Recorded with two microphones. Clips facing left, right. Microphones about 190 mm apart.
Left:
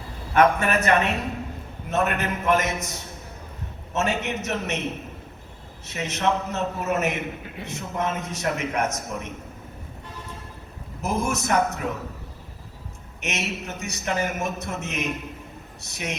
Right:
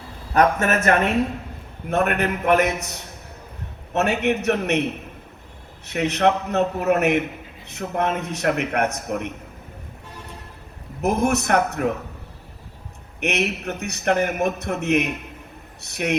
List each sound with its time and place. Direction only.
0.3 s a man's voice: 45° right (ahead or behind); by 2.8 s 65° right (ahead or behind)
3.9 s a man's voice: 60° right (ahead or behind)
7.4 s a sound: 70° left (ahead or behind)
7.7 s a man's voice: 60° right (ahead or behind)
11.0 s a man's voice: 65° right (ahead or behind)
13.1 s a man's voice: 60° right (ahead or behind)